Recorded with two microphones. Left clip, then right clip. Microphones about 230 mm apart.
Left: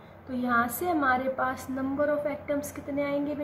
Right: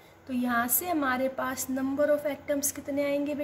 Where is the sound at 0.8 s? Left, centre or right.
Right.